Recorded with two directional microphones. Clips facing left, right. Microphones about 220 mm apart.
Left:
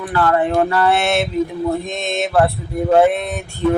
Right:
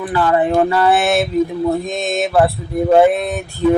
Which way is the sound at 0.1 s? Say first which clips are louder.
Right 1 dB; 15° right (ahead or behind).